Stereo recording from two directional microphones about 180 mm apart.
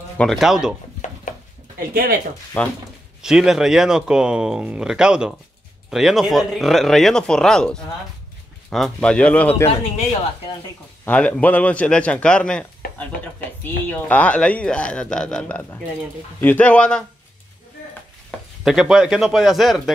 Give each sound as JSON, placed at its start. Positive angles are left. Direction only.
{"t": 0.2, "sound": "speech", "side_deg": 0}
{"t": 2.6, "sound": "speech", "side_deg": 10}
{"t": 3.2, "sound": "speech", "side_deg": -5}
{"t": 11.1, "sound": "speech", "side_deg": 5}
{"t": 13.8, "sound": "speech", "side_deg": 10}
{"t": 18.6, "sound": "speech", "side_deg": 0}